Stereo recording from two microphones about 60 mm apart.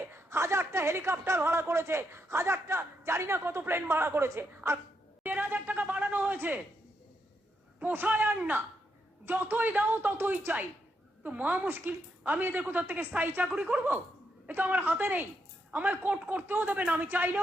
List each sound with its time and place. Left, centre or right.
0.1 s a woman's voice: right
5.2 s a sound: right
7.8 s speech: right